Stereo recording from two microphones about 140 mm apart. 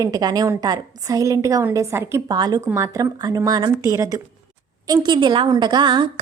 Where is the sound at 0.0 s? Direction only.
25° right (ahead or behind).